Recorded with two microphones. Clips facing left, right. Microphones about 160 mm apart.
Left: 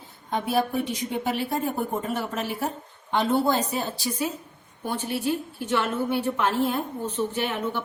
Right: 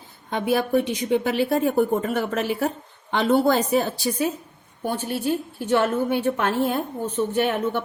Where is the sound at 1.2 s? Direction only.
80° right; by 4.2 s 65° right (ahead or behind).